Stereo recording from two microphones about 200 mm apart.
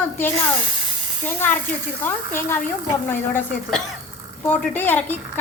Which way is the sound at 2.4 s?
10° left (ahead or behind).